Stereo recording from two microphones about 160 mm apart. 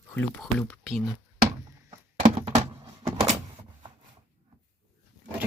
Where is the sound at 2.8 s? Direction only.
35° right (ahead or behind).